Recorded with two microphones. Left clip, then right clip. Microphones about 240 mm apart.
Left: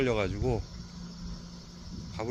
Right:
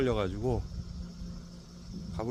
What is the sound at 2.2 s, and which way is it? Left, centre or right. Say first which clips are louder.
Speech: left 1 dB; centre.